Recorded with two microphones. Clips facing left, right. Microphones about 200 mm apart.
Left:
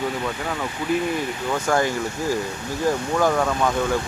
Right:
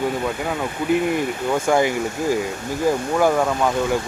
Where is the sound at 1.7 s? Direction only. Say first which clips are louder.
Right 3 dB; 15° right (ahead or behind).